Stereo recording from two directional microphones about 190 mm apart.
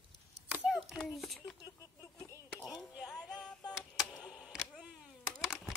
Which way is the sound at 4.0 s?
5° right (ahead or behind).